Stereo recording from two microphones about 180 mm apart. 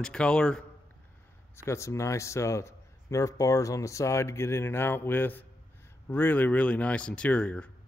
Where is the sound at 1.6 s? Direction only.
15° left (ahead or behind).